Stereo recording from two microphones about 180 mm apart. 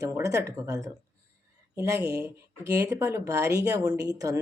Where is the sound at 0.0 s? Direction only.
20° right (ahead or behind).